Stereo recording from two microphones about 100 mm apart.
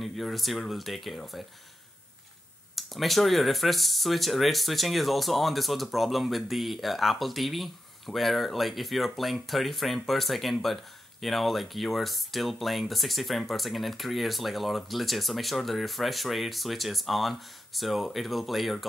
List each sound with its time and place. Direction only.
0.0 s speech: centre (ahead or behind)
2.7 s speech: centre (ahead or behind)